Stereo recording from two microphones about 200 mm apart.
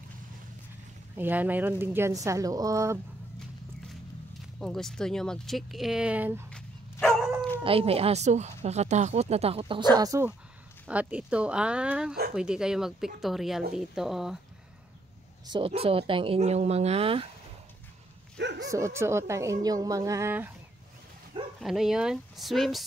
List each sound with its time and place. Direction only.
1.1 s speech: 10° right (ahead or behind)
4.6 s speech: centre (ahead or behind)
6.5 s dog: 5° left (ahead or behind)
7.6 s speech: 30° right (ahead or behind); by 14.4 s centre (ahead or behind)
15.4 s speech: 25° right (ahead or behind)
18.4 s speech: 60° right (ahead or behind)
18.7 s speech: 15° right (ahead or behind)
21.5 s speech: centre (ahead or behind)